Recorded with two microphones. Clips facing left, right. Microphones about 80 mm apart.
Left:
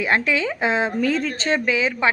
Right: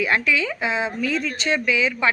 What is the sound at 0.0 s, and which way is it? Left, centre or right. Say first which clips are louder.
Speech: left 1 dB; left.